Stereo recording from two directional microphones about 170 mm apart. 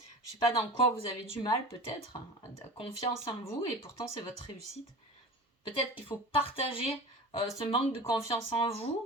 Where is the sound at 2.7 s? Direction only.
35° left (ahead or behind).